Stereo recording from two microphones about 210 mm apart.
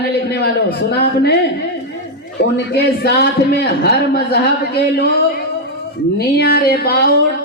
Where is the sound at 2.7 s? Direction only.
50° left (ahead or behind).